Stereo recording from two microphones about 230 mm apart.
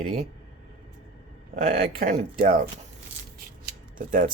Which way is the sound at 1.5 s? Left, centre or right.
Right.